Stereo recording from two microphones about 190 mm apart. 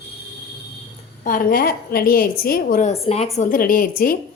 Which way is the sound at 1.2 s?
45° left (ahead or behind).